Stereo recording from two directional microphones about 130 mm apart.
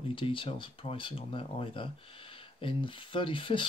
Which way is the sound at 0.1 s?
40° left (ahead or behind).